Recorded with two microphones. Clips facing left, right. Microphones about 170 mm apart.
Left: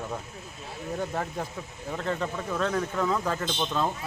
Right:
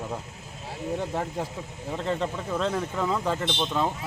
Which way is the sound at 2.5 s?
5° right (ahead or behind).